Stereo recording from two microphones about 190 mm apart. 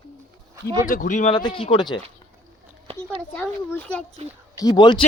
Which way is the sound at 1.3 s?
25° left (ahead or behind).